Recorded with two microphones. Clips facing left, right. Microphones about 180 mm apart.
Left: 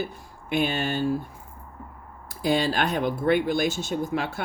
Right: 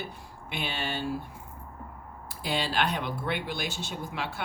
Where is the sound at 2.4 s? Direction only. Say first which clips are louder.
Left 6 dB; 45° left (ahead or behind).